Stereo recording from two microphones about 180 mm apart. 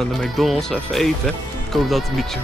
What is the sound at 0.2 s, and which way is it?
Speech, centre (ahead or behind).